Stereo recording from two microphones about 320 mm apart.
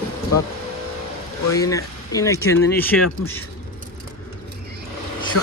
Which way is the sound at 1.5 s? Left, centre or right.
Centre.